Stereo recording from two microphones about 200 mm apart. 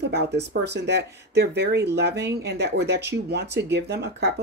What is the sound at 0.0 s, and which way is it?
Speech, 60° right (ahead or behind).